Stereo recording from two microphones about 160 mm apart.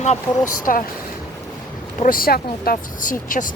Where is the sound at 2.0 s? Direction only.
65° left (ahead or behind).